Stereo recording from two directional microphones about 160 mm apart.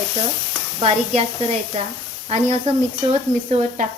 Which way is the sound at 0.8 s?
40° right (ahead or behind).